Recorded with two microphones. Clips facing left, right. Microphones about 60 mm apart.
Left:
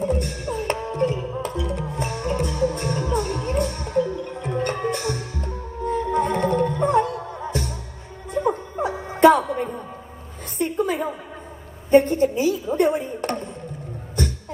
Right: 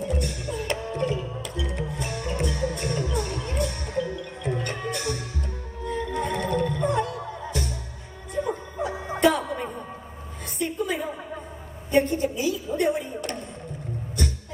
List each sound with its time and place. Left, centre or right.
0.0 s music: left
10.6 s a sound: left
14.2 s music: left